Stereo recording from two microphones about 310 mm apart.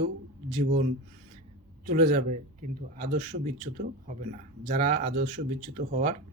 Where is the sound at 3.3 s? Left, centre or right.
Right.